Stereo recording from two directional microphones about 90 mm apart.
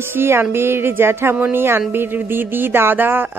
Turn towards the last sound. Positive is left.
turn(degrees=-20)  # may be behind; listen again after turning